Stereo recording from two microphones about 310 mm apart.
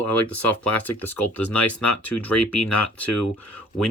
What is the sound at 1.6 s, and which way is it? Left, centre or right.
Speech, left.